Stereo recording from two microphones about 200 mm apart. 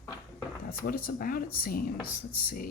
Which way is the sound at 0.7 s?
50° left (ahead or behind).